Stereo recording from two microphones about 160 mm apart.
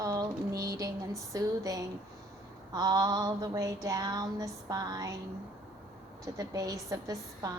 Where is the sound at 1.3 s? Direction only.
20° right (ahead or behind).